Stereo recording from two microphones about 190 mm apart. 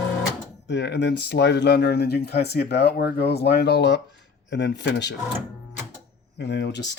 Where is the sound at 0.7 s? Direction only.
65° left (ahead or behind).